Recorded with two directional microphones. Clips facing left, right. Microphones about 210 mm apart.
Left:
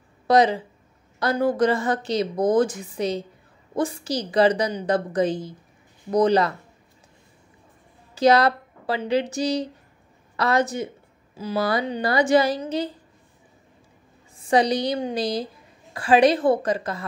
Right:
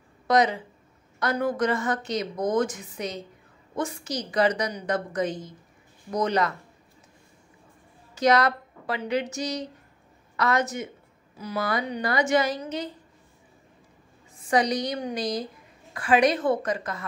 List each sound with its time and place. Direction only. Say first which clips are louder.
0.3 s a woman's voice: left 4 dB; 30° left (ahead or behind)
8.1 s a woman's voice: left 4 dB; 30° left (ahead or behind)
14.5 s a woman's voice: left 4 dB; 30° left (ahead or behind)